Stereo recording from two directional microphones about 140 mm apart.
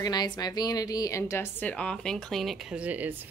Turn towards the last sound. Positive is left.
turn(degrees=-10)  # may be behind; listen again after turning